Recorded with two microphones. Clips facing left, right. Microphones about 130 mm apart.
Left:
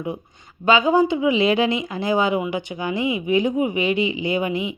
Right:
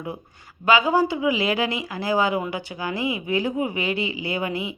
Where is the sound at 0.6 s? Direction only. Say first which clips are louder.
Left 2 dB; 25° left (ahead or behind).